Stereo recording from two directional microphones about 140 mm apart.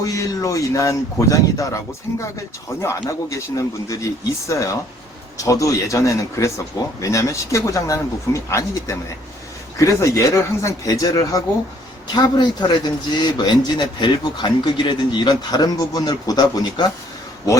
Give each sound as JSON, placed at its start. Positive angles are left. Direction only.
{"t": 0.0, "sound": "speech", "side_deg": 25}